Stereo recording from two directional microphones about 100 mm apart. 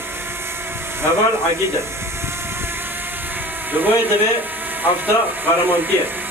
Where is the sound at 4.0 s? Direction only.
20° right (ahead or behind).